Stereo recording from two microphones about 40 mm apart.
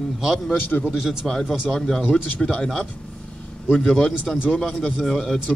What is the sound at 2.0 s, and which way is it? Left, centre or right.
Speech, left.